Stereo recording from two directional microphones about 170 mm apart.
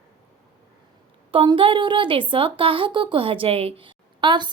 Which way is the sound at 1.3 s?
30° right (ahead or behind).